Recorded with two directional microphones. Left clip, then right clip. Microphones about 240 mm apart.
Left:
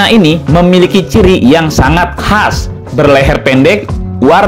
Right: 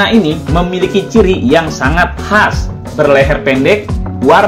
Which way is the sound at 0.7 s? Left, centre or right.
Left.